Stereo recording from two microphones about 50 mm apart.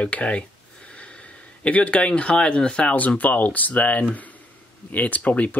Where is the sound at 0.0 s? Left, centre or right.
Left.